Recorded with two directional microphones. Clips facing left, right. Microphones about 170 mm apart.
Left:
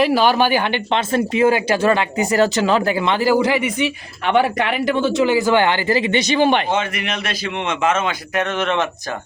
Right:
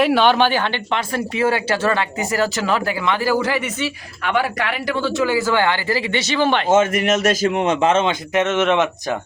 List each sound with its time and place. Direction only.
0.0 s speech: 5° left (ahead or behind)
6.7 s a man's voice: 45° right (ahead or behind); by 8.9 s 20° right (ahead or behind)